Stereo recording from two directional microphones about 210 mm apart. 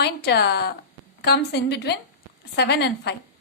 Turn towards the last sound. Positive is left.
turn(degrees=50)  # may be behind; listen again after turning